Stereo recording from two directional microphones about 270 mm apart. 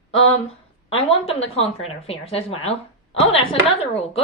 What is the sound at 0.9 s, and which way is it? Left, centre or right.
A woman's voice, left.